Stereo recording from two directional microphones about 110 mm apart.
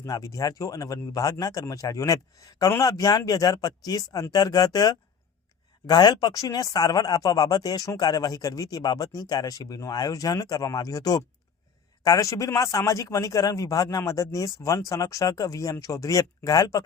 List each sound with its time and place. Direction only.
0.0 s speech: 30° left (ahead or behind)